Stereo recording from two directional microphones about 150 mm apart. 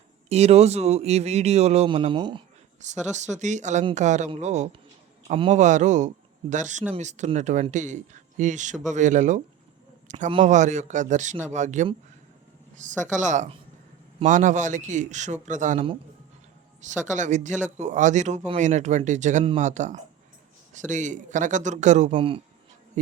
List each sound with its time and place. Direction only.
0.3 s speech: 45° right (ahead or behind)
2.8 s a man's voice: 50° right (ahead or behind)
13.0 s a man's voice: 55° right (ahead or behind)
22.1 s speech: 35° right (ahead or behind)